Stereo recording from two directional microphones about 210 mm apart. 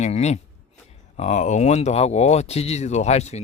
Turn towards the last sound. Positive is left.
turn(degrees=30)  # may be behind; listen again after turning